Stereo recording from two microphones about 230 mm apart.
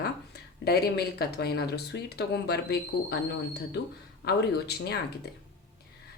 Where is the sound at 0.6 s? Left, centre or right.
Left.